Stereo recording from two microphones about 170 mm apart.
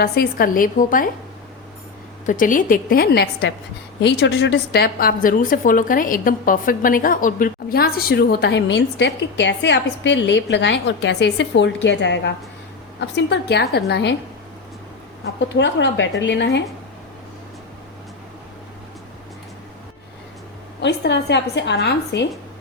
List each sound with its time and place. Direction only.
0.0 s a woman's voice: 60° left (ahead or behind)
2.2 s a woman's voice: 50° left (ahead or behind); by 3.5 s 75° left (ahead or behind)
4.0 s a woman's voice: 90° left
15.4 s a woman's voice: 90° left
20.8 s a woman's voice: 85° left